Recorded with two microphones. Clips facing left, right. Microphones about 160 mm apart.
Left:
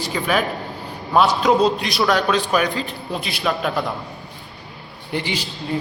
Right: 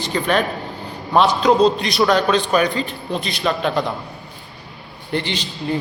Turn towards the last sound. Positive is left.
turn(degrees=10)  # may be behind; listen again after turning